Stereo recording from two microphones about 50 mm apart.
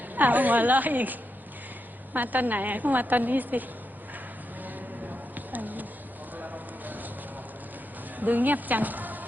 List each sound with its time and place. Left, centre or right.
0.2 s a woman's voice: right
5.3 s a sound: right
8.2 s speech: right